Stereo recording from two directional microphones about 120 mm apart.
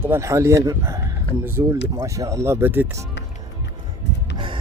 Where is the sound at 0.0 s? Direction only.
20° right (ahead or behind).